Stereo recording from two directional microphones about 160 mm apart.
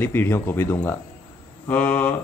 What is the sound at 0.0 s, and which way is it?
A man's voice, 15° left (ahead or behind).